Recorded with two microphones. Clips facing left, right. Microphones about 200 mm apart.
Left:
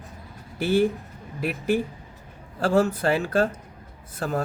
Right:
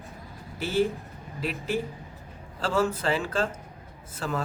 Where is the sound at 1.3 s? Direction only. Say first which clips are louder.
Left 5 dB; 55° left (ahead or behind).